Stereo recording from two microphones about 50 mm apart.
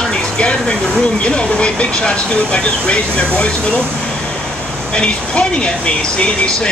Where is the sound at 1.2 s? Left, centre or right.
Centre.